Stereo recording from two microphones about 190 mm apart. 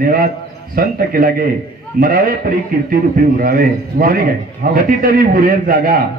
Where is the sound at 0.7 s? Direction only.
50° right (ahead or behind).